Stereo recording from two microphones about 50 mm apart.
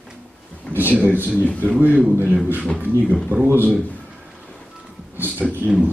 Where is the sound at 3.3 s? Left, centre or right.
Right.